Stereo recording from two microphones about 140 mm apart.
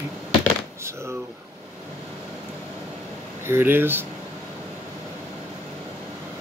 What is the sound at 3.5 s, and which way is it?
Speech, 15° right (ahead or behind).